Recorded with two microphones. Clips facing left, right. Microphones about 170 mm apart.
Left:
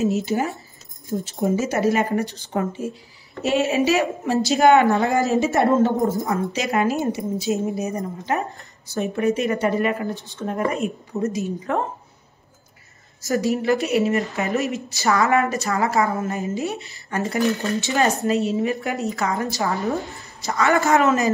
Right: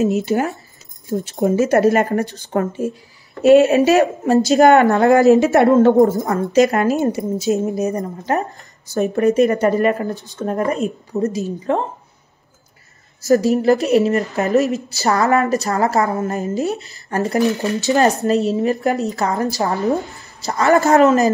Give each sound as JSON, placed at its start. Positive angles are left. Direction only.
{"t": 0.0, "sound": "a woman's voice", "side_deg": -60}
{"t": 3.4, "sound": "a woman's voice", "side_deg": -50}
{"t": 4.2, "sound": "a woman's voice", "side_deg": -45}
{"t": 6.2, "sound": "a woman's voice", "side_deg": -45}
{"t": 13.2, "sound": "speech", "side_deg": -40}
{"t": 17.4, "sound": "speech", "side_deg": -20}
{"t": 17.7, "sound": "speech", "side_deg": -35}
{"t": 19.7, "sound": "a woman's voice", "side_deg": -20}
{"t": 20.4, "sound": "speech", "side_deg": -40}